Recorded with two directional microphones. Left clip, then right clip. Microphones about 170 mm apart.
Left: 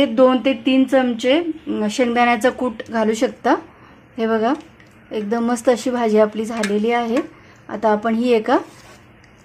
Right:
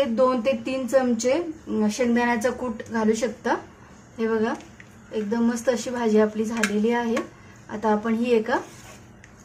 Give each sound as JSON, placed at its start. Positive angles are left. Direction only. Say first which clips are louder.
{"t": 0.0, "sound": "a woman's voice", "louder": "left 6 dB", "side_deg": 45}